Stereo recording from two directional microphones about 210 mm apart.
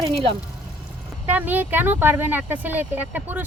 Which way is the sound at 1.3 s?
10° right (ahead or behind).